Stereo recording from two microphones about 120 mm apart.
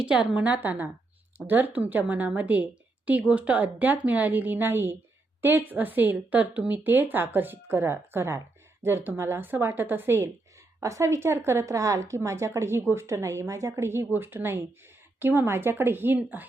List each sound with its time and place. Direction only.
0.0 s speech: 10° right (ahead or behind)